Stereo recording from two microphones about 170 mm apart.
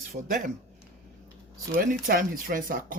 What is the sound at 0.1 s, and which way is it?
Speech, 55° right (ahead or behind).